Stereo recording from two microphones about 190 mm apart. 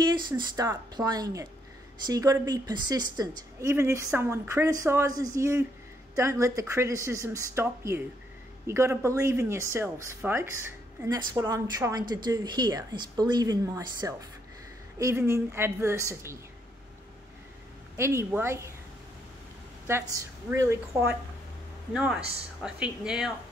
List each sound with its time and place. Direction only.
0.0 s speech: 25° right (ahead or behind)
17.9 s speech: 15° right (ahead or behind)
19.9 s a woman's voice: 15° right (ahead or behind)